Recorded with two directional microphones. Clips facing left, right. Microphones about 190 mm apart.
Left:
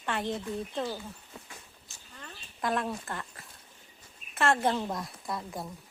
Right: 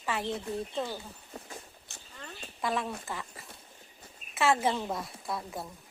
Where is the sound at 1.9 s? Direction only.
65° right (ahead or behind).